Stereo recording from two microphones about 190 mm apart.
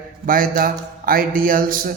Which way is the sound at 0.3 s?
45° right (ahead or behind).